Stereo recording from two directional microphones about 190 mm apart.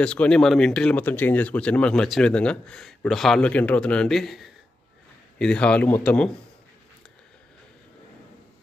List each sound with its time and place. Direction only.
0.0 s a man's voice: 5° left (ahead or behind)